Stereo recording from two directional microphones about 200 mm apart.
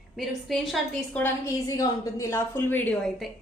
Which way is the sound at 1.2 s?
15° left (ahead or behind).